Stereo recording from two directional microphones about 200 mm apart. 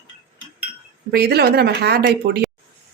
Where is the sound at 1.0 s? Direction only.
55° right (ahead or behind).